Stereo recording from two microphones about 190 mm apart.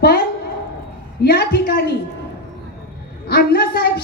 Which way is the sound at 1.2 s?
55° left (ahead or behind).